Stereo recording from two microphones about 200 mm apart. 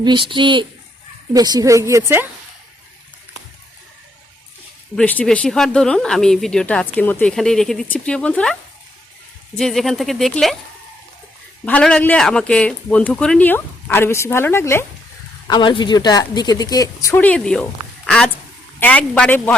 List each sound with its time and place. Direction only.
0.0 s a woman's voice: 25° right (ahead or behind)
4.9 s speech: 5° left (ahead or behind)
9.6 s speech: centre (ahead or behind)
11.6 s a man's voice: 5° left (ahead or behind)